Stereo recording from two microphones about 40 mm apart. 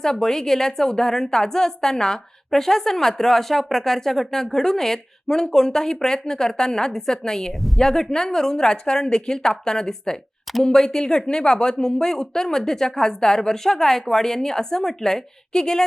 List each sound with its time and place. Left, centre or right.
0.0 s a woman's voice: centre